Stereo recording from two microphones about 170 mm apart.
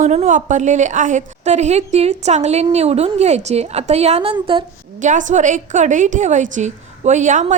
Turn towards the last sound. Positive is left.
turn(degrees=-45)  # may be behind; listen again after turning